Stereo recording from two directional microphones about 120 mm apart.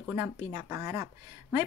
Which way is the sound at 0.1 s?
20° right (ahead or behind).